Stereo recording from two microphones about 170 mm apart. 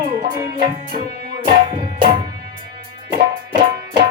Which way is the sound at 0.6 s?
50° right (ahead or behind).